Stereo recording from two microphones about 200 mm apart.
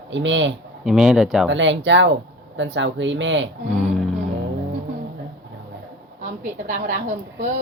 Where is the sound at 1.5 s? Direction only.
65° right (ahead or behind).